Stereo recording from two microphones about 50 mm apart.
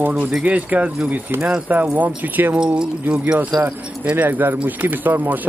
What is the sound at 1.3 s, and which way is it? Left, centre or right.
Speech, right.